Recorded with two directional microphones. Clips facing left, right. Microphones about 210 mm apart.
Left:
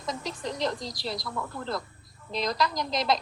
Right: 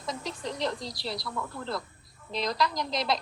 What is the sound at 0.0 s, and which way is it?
A woman's voice, 45° left (ahead or behind).